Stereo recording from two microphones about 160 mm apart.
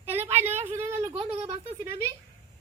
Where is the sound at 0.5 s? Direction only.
45° right (ahead or behind).